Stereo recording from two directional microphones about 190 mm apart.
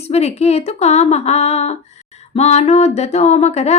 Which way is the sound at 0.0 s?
35° left (ahead or behind).